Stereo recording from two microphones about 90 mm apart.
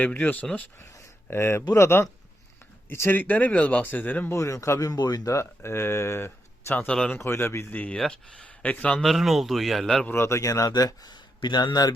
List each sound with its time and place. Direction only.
0.0 s speech: 20° left (ahead or behind)
1.3 s speech: 30° left (ahead or behind)
4.3 s speech: 35° left (ahead or behind)
6.8 s speech: 10° left (ahead or behind)
7.2 s speech: 30° left (ahead or behind); by 9.0 s 10° left (ahead or behind)
9.0 s speech: centre (ahead or behind)
10.1 s speech: 30° left (ahead or behind); by 11.2 s 45° left (ahead or behind)
11.3 s speech: 55° left (ahead or behind)